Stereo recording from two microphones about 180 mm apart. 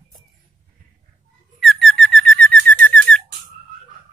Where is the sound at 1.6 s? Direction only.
Centre (ahead or behind).